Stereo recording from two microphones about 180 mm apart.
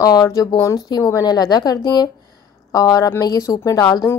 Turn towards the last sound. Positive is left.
turn(degrees=20)  # may be behind; listen again after turning